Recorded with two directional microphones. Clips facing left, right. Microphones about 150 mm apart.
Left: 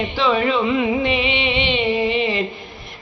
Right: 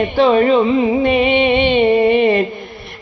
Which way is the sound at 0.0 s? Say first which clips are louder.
Right 7 dB; 45° right (ahead or behind).